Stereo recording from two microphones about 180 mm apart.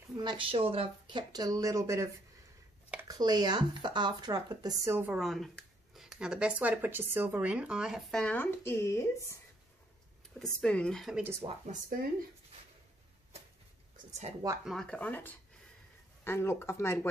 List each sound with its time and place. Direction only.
0.2 s speech: 25° right (ahead or behind)
3.1 s speech: 20° right (ahead or behind)
5.2 s speech: centre (ahead or behind)
10.4 s speech: 5° left (ahead or behind)
11.4 s speech: 45° right (ahead or behind)
13.9 s a sound: 40° right (ahead or behind)
14.6 s speech: centre (ahead or behind)